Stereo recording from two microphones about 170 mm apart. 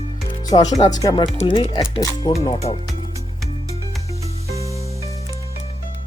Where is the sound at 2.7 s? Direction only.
35° left (ahead or behind).